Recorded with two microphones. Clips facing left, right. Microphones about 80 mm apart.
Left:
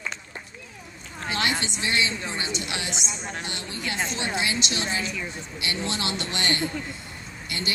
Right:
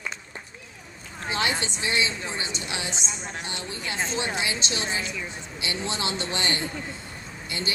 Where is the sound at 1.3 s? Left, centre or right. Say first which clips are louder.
Even; right.